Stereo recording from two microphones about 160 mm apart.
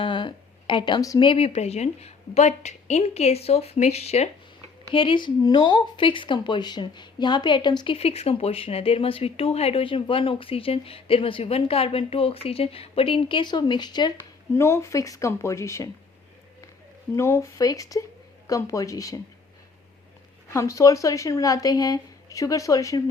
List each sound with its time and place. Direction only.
0.0 s a sound: 30° left (ahead or behind)
1.3 s speech: 40° left (ahead or behind)
14.5 s a woman's voice: 15° left (ahead or behind)
17.2 s speech: 15° left (ahead or behind)
20.5 s speech: 20° left (ahead or behind)